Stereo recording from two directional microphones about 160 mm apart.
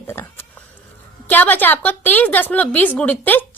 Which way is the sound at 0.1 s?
15° left (ahead or behind).